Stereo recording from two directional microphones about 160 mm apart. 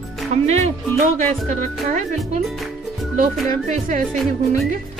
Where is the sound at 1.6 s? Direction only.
50° right (ahead or behind).